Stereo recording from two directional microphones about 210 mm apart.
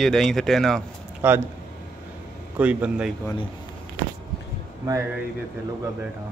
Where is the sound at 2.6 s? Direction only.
5° right (ahead or behind).